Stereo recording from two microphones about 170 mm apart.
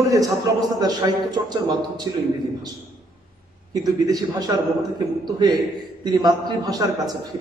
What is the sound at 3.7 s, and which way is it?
A man's voice, 20° right (ahead or behind).